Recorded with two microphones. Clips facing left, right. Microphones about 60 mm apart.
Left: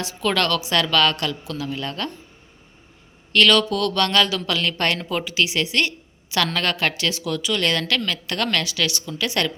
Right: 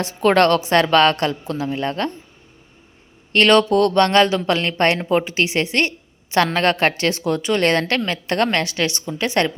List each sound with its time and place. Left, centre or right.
0.0 s a woman's voice: right
3.3 s a woman's voice: right